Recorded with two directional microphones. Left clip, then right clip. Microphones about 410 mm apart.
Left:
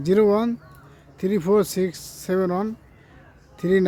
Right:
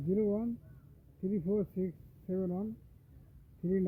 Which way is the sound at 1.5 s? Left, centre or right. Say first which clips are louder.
Left 16 dB; left.